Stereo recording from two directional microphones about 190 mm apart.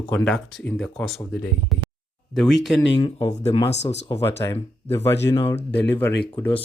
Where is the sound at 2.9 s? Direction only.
25° left (ahead or behind).